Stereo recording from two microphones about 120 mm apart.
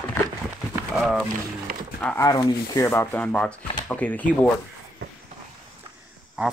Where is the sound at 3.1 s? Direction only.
10° left (ahead or behind).